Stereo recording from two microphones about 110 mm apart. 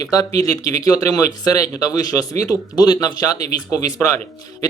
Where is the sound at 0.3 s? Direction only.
35° left (ahead or behind).